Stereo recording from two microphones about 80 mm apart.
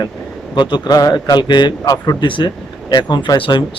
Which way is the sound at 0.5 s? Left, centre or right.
Left.